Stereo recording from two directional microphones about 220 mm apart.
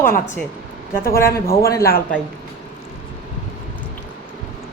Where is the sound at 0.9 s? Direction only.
40° left (ahead or behind).